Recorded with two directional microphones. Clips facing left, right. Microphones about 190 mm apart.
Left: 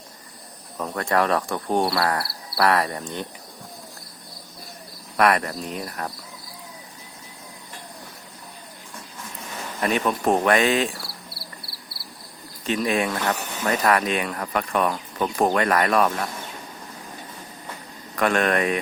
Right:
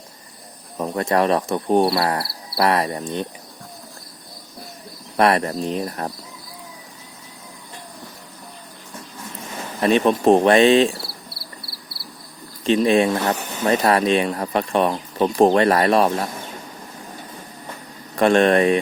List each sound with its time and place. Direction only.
0.8 s speech: 20° right (ahead or behind)
5.1 s speech: 30° right (ahead or behind)
9.8 s speech: 25° right (ahead or behind)
12.6 s speech: 25° right (ahead or behind)
18.2 s speech: 30° right (ahead or behind)